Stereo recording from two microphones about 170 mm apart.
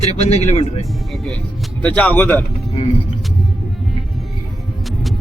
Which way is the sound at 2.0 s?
10° left (ahead or behind).